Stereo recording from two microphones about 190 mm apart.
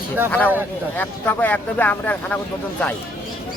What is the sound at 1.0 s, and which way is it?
Speech, 10° left (ahead or behind).